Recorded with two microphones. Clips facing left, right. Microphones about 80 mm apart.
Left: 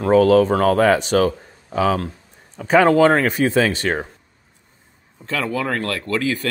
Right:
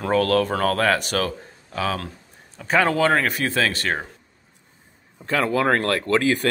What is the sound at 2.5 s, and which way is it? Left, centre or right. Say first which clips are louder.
Speech: left 6 dB; left.